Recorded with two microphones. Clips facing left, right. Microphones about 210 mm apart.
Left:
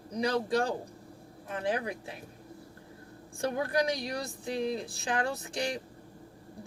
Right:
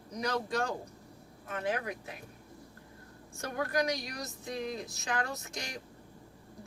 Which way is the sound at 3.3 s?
30° left (ahead or behind).